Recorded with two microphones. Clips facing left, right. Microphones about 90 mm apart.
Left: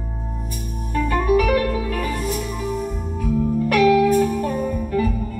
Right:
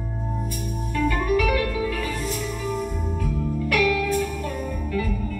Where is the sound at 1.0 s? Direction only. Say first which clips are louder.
Left 4 dB; 30° left (ahead or behind).